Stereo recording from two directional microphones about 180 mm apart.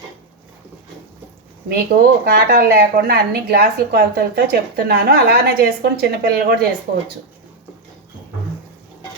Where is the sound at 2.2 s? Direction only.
55° right (ahead or behind).